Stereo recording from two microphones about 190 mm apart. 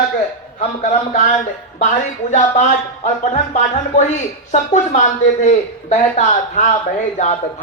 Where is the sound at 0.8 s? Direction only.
40° left (ahead or behind).